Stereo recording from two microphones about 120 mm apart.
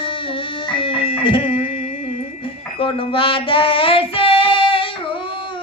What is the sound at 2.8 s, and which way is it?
Child singing, 50° left (ahead or behind).